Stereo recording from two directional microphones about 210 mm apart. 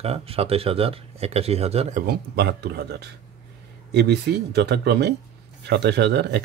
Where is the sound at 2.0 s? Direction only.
50° right (ahead or behind).